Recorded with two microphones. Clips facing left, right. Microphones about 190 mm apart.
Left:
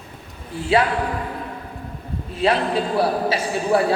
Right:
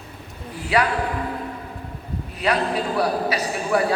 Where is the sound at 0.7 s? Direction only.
25° left (ahead or behind).